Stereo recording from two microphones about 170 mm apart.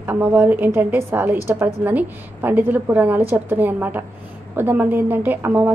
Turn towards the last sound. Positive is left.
turn(degrees=-10)  # may be behind; listen again after turning